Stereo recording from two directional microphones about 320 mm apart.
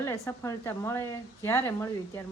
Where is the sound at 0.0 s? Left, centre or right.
Centre.